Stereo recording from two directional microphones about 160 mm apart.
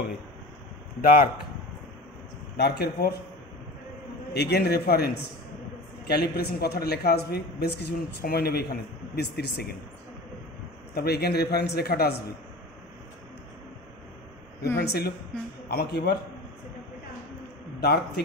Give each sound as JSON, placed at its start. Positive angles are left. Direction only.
{"t": 1.0, "sound": "speech", "side_deg": 65}
{"t": 2.5, "sound": "speech", "side_deg": 90}
{"t": 4.3, "sound": "speech", "side_deg": 90}
{"t": 9.1, "sound": "speech", "side_deg": 90}
{"t": 11.0, "sound": "speech", "side_deg": 80}
{"t": 14.8, "sound": "speech", "side_deg": 85}
{"t": 17.7, "sound": "a man's voice", "side_deg": 90}